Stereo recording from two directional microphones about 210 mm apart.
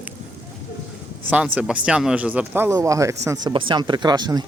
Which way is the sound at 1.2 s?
5° right (ahead or behind).